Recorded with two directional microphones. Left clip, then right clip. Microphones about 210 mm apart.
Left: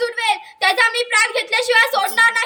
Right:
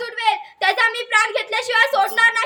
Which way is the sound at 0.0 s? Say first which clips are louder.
Left 1 dB; 20° right (ahead or behind).